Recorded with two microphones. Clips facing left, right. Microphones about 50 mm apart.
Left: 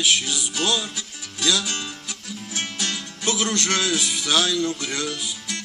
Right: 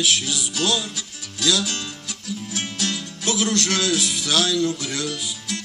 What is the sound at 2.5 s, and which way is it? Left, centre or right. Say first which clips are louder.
Music: even; centre.